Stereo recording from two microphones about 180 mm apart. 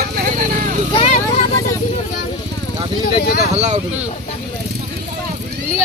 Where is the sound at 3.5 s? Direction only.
40° right (ahead or behind).